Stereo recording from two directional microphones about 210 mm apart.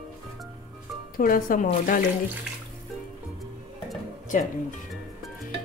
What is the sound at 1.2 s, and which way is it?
Speech, 40° left (ahead or behind).